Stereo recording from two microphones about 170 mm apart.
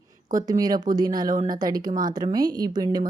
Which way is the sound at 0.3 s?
20° right (ahead or behind).